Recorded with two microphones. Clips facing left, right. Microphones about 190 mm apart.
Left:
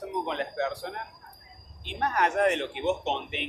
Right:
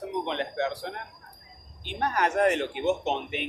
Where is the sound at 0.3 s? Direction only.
30° right (ahead or behind).